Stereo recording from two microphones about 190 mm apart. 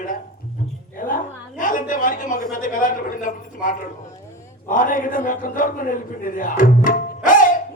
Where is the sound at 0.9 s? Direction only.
45° left (ahead or behind).